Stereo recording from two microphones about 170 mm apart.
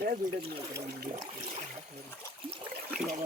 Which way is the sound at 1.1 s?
45° right (ahead or behind).